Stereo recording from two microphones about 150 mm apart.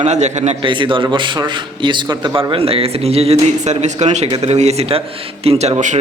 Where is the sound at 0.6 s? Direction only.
35° right (ahead or behind); by 6.0 s 50° right (ahead or behind).